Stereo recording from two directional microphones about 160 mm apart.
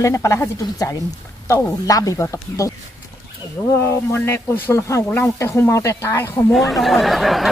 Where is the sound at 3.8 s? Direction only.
15° left (ahead or behind).